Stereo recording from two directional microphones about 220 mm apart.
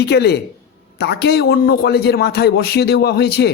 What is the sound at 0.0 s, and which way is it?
A man's voice, 50° left (ahead or behind).